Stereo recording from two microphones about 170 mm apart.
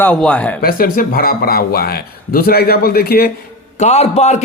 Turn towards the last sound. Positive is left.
turn(degrees=40)  # may be behind; listen again after turning